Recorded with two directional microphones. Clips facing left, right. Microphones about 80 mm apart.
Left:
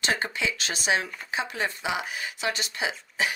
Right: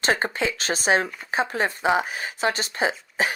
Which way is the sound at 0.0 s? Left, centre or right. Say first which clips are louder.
Right 5 dB; right.